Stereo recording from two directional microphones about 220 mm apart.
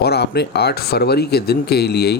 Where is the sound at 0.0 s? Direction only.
50° left (ahead or behind).